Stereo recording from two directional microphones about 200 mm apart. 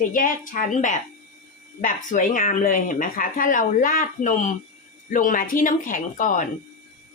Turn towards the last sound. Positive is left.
turn(degrees=40)  # may be behind; listen again after turning